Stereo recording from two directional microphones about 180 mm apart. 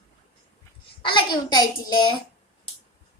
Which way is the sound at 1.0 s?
25° left (ahead or behind).